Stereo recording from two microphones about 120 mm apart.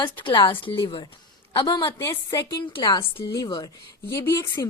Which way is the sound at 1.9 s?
25° left (ahead or behind).